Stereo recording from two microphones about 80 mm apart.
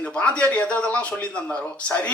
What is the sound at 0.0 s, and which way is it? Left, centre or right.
Speech, centre.